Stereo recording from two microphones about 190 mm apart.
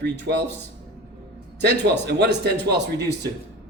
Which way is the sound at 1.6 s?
65° right (ahead or behind).